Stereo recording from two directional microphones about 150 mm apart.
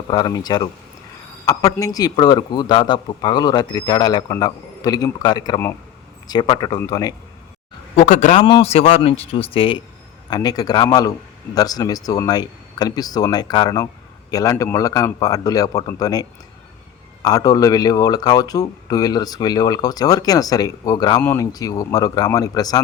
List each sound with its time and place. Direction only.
0.1 s a man's voice: 25° left (ahead or behind)
7.9 s a man's voice: 50° left (ahead or behind); by 16.2 s 25° left (ahead or behind)
17.2 s a man's voice: 25° left (ahead or behind)